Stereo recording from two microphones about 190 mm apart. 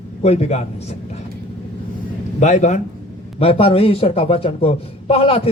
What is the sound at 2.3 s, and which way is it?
A man's voice, 40° left (ahead or behind).